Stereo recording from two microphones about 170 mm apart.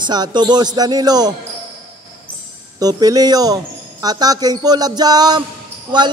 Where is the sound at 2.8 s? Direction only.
20° right (ahead or behind).